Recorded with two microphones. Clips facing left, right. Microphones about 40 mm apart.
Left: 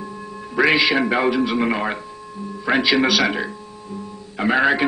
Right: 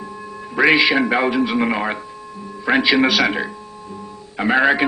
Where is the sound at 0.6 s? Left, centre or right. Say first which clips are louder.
Right 2 dB; centre.